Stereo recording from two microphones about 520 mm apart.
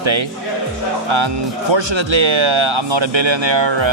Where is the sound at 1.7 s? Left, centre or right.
Right.